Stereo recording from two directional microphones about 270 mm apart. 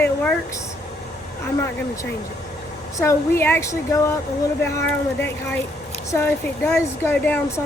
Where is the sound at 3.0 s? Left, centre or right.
Centre.